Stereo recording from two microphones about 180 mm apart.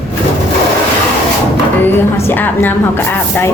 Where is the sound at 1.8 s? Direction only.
10° left (ahead or behind).